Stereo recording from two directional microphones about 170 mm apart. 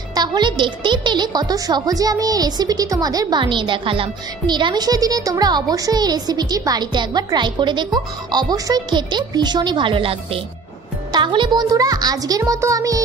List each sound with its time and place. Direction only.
0.1 s a woman's voice: 25° right (ahead or behind)